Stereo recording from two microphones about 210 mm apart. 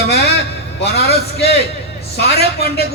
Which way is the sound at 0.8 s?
50° left (ahead or behind).